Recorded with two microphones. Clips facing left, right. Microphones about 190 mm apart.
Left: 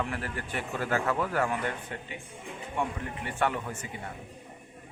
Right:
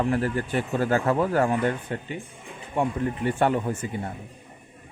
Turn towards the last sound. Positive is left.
turn(degrees=-30)  # may be behind; listen again after turning